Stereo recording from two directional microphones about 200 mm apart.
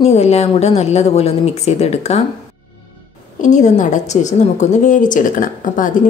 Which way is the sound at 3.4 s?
40° left (ahead or behind).